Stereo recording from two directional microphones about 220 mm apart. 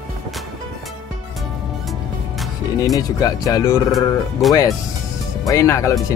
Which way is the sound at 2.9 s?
15° left (ahead or behind).